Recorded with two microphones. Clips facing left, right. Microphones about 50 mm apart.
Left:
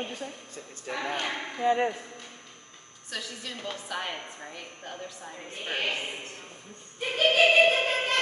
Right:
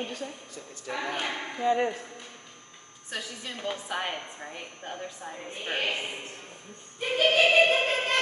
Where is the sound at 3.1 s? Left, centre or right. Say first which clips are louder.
Right 1 dB; centre.